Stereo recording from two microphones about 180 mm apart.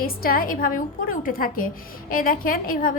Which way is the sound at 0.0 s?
55° left (ahead or behind).